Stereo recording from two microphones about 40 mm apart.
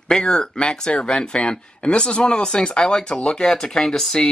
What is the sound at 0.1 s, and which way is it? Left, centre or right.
Speech, centre.